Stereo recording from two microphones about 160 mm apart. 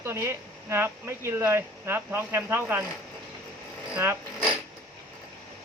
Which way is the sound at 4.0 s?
15° right (ahead or behind).